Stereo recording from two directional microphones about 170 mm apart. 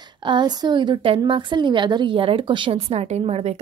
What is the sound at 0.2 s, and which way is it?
A woman's voice, 25° right (ahead or behind).